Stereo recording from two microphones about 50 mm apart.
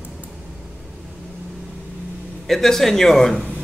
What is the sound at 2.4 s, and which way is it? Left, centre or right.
Speech, centre.